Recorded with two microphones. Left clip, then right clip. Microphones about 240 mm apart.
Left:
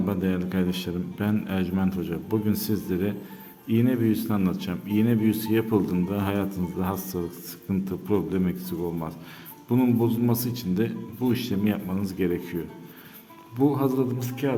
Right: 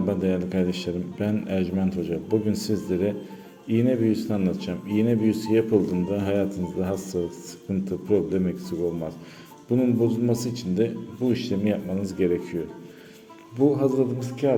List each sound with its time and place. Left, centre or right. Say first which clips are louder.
0.1 s speech: right 3 dB; centre
13.7 s speech: right 2 dB; centre